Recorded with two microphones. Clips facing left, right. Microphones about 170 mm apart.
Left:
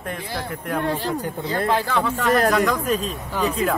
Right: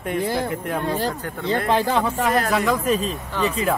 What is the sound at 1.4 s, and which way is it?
Speech, 25° right (ahead or behind).